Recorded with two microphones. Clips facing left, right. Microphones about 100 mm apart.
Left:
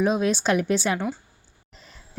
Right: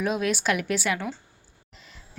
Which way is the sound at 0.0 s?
25° left (ahead or behind).